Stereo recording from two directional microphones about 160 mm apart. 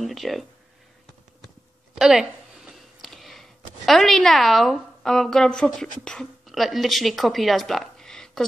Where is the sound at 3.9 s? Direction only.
Centre (ahead or behind).